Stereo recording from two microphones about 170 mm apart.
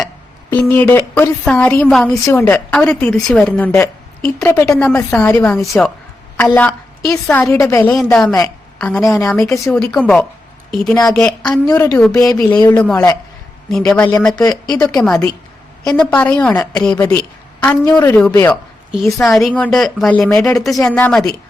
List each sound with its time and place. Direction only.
0.5 s a woman's voice: 10° left (ahead or behind)
6.3 s a sound: 10° left (ahead or behind)
7.3 s a woman's voice: 15° left (ahead or behind)
8.0 s speech: 5° left (ahead or behind)
9.3 s a woman's voice: 15° left (ahead or behind)
9.6 s a woman's voice: 5° left (ahead or behind)